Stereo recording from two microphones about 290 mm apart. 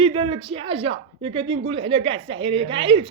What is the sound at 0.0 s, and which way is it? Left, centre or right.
Speech, centre.